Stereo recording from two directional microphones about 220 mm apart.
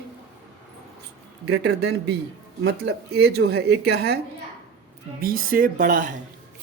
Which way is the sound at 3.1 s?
50° right (ahead or behind).